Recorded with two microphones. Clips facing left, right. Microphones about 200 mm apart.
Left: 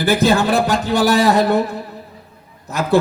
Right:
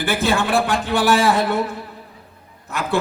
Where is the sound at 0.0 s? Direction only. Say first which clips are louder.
Left 5 dB; 40° left (ahead or behind).